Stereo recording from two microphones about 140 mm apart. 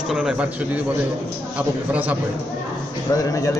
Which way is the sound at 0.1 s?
5° right (ahead or behind).